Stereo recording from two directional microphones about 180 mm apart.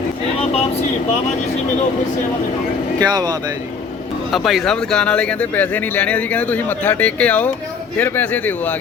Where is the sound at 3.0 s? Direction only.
20° right (ahead or behind).